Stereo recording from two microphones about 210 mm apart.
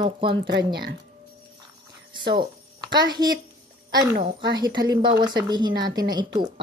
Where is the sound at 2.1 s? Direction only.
20° right (ahead or behind).